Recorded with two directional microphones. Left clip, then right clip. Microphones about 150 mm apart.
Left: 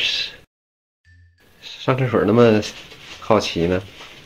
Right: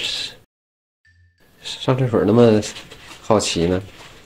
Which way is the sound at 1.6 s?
20° right (ahead or behind).